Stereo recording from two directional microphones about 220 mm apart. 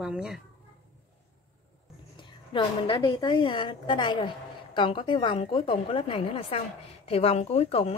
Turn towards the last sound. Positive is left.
turn(degrees=25)  # may be behind; listen again after turning